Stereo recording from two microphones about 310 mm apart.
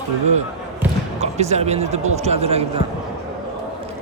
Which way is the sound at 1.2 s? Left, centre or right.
Right.